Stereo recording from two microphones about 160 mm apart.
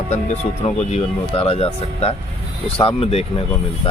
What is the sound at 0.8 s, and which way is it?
Speech, 40° left (ahead or behind).